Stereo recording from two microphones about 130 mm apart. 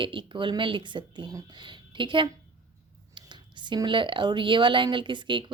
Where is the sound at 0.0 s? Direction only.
40° right (ahead or behind).